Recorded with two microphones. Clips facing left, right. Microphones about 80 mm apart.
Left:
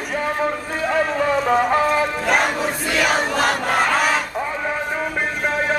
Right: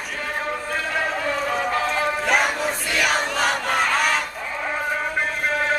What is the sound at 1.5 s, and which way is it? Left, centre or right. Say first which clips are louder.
Music: left 7 dB; left.